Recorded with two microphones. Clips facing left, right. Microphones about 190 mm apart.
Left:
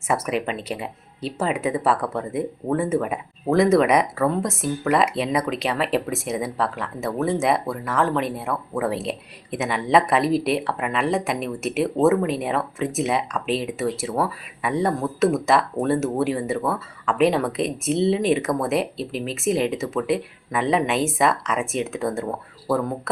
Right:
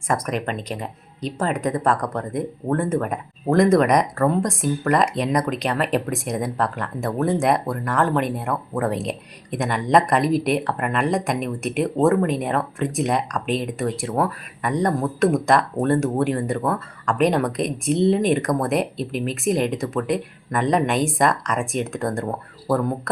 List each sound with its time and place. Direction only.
0.1 s speech: 5° left (ahead or behind)